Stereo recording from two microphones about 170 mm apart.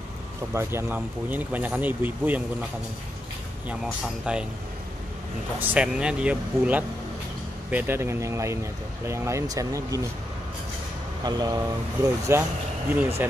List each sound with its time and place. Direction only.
0.5 s speech: 15° right (ahead or behind)
3.6 s speech: 5° right (ahead or behind)
5.6 s speech: 10° right (ahead or behind)
11.2 s speech: 25° right (ahead or behind)